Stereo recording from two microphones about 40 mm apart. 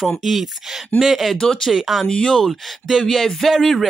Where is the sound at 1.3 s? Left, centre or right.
Centre.